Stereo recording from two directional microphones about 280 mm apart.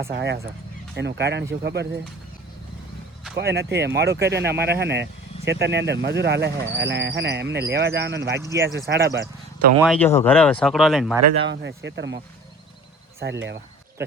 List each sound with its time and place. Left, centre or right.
0.1 s speech: right
3.3 s speech: right
8.4 s speech: centre
8.9 s speech: right
9.9 s speech: centre
11.4 s speech: right
13.1 s speech: right